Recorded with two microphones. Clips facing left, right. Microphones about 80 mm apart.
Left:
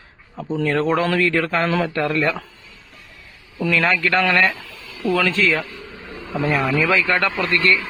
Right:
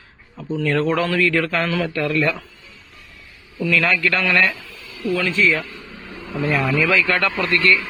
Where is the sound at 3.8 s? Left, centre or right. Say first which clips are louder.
Left 3 dB; left.